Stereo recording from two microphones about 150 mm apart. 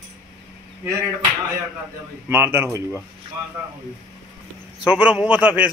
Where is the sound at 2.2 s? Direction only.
15° right (ahead or behind).